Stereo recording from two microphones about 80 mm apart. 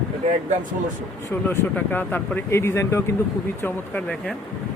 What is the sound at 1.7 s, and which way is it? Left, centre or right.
Speech, left.